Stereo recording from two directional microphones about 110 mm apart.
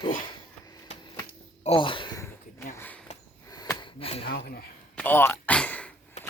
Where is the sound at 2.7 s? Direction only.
15° left (ahead or behind).